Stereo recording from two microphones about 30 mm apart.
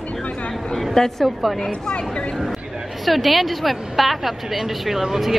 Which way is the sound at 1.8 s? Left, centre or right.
Left.